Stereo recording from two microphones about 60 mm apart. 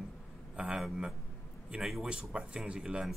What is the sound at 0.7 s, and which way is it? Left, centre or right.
Speech, centre.